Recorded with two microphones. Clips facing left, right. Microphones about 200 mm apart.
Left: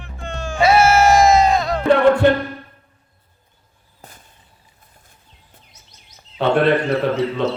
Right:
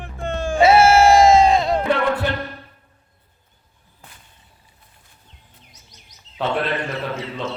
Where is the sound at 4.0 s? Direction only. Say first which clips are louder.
Left 5 dB; 45° left (ahead or behind).